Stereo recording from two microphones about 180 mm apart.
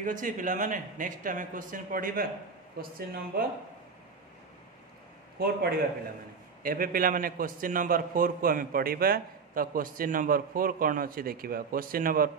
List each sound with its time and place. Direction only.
0.0 s a man's voice: 45° right (ahead or behind)
5.4 s a man's voice: 60° right (ahead or behind)